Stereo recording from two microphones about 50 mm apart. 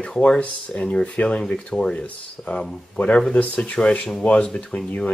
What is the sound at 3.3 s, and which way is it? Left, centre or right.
Speech, left.